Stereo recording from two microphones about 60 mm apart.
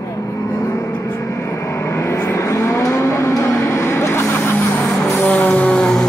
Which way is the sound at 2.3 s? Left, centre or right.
Left.